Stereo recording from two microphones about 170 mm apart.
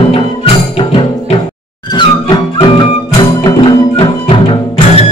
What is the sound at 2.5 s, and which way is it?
Music, 30° left (ahead or behind).